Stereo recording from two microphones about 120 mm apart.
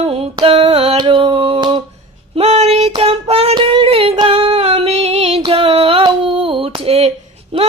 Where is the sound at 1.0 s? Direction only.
45° right (ahead or behind).